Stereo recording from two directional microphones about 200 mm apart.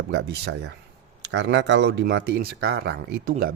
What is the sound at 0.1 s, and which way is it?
Speech, 55° right (ahead or behind).